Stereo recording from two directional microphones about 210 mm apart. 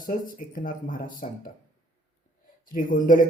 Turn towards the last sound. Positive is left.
turn(degrees=40)  # may be behind; listen again after turning